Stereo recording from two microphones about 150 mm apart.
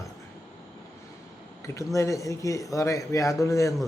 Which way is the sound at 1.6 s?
20° left (ahead or behind).